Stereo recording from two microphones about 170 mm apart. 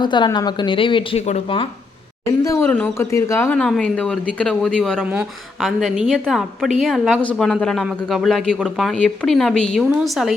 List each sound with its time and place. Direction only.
0.0 s speech: 25° left (ahead or behind)
2.4 s a woman's voice: 15° left (ahead or behind); by 10.3 s 5° right (ahead or behind)